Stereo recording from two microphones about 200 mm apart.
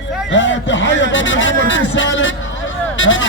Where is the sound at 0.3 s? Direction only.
70° left (ahead or behind).